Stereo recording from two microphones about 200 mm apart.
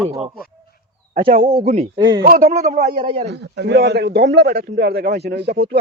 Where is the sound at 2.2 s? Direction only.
45° right (ahead or behind).